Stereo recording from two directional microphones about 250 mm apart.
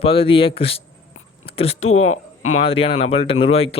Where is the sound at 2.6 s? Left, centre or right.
Left.